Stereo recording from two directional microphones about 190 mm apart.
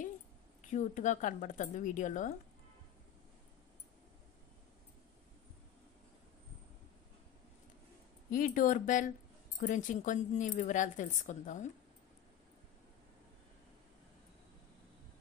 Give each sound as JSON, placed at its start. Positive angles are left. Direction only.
{"t": 0.7, "sound": "speech", "side_deg": 40}
{"t": 8.3, "sound": "speech", "side_deg": 45}